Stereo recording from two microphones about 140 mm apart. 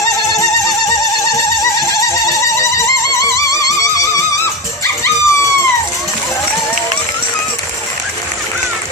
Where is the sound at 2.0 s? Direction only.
20° left (ahead or behind).